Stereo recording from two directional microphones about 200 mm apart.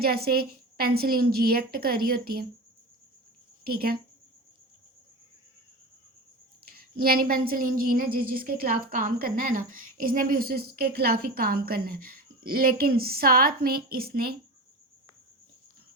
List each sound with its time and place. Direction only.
0.0 s a woman's voice: 50° right (ahead or behind)
3.7 s a woman's voice: 50° right (ahead or behind)
6.7 s a woman's voice: 50° right (ahead or behind)